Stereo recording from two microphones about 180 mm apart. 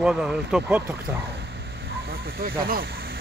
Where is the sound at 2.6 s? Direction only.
55° right (ahead or behind).